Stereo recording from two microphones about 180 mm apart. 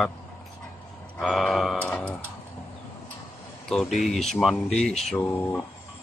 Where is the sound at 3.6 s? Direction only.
Centre (ahead or behind).